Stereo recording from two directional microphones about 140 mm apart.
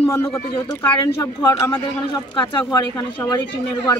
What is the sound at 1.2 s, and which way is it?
Speech, 25° left (ahead or behind).